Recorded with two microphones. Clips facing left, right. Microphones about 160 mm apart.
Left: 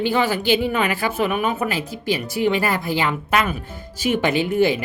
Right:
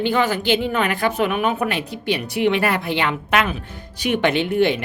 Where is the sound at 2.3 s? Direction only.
65° right (ahead or behind).